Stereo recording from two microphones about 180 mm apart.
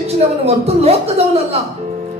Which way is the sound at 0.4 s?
35° right (ahead or behind).